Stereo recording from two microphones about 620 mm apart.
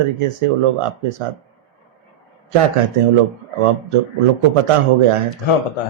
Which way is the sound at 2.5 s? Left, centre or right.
Right.